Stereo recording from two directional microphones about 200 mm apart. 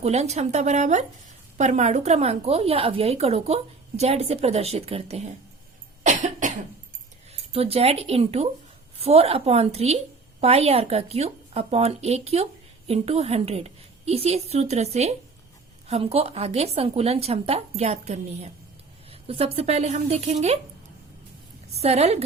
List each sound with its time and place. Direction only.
0.0 s a woman's voice: 35° right (ahead or behind)
6.0 s cough: 40° right (ahead or behind)
7.5 s a woman's voice: 30° right (ahead or behind)
21.8 s a woman's voice: 30° right (ahead or behind)